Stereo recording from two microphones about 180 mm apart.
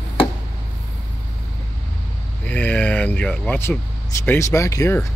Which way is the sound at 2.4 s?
10° left (ahead or behind).